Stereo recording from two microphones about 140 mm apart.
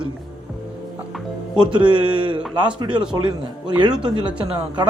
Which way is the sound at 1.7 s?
35° right (ahead or behind).